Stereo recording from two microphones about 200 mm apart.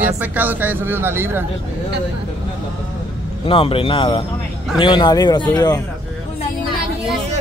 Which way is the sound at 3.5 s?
25° left (ahead or behind).